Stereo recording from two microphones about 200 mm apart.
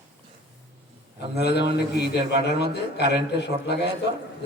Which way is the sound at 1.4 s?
55° left (ahead or behind).